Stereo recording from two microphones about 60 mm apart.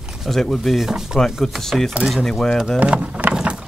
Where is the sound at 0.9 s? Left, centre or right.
Centre.